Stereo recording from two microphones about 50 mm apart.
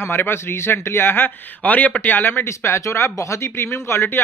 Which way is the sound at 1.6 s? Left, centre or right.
Left.